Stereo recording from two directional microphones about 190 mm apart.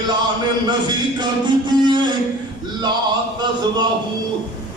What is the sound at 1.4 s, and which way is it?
Music, 25° right (ahead or behind).